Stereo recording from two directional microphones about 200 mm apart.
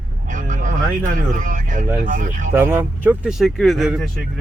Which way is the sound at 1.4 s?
40° right (ahead or behind).